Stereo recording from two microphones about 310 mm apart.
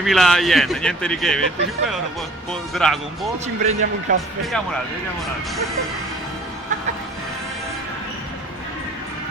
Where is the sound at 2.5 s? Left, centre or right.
Centre.